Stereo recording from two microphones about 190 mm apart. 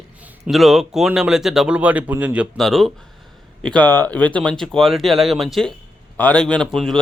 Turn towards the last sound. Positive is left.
turn(degrees=5)  # may be behind; listen again after turning